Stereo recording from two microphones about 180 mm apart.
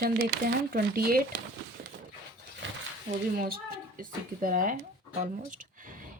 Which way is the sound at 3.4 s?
55° right (ahead or behind).